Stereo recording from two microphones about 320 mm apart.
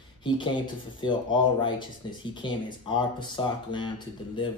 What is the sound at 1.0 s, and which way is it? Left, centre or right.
Speech, centre.